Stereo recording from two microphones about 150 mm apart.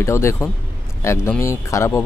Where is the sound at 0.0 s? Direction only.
20° left (ahead or behind).